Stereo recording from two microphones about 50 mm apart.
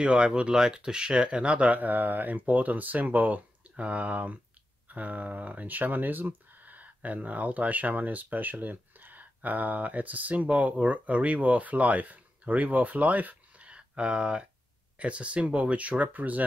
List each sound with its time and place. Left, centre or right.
0.0 s speech: centre